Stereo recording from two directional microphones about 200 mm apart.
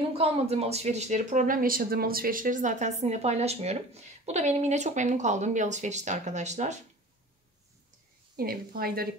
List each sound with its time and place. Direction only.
0.1 s speech: 30° right (ahead or behind)
8.4 s a woman's voice: 50° right (ahead or behind)